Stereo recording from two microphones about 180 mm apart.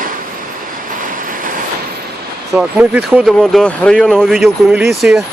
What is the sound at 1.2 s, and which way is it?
Train, 50° right (ahead or behind).